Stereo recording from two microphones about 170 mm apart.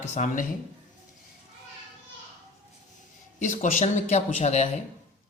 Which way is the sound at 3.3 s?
45° left (ahead or behind).